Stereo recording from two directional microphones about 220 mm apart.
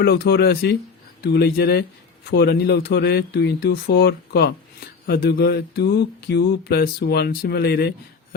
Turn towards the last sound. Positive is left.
turn(degrees=45)  # may be behind; listen again after turning